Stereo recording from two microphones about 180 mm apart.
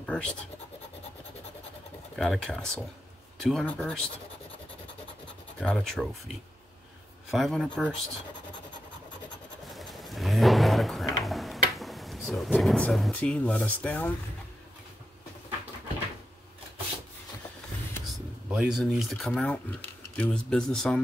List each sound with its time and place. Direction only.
0.0 s speech: 5° left (ahead or behind)
2.1 s speech: centre (ahead or behind)
5.6 s speech: 5° left (ahead or behind)
9.7 s a sound: centre (ahead or behind)
12.5 s speech: 5° left (ahead or behind)
18.1 s speech: 5° right (ahead or behind)